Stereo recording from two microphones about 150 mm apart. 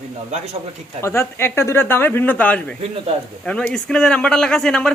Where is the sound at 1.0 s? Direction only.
15° left (ahead or behind).